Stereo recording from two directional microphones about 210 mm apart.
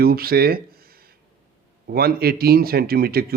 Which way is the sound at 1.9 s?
45° right (ahead or behind).